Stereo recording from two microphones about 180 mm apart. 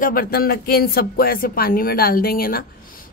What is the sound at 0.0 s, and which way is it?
A woman's voice, 55° left (ahead or behind).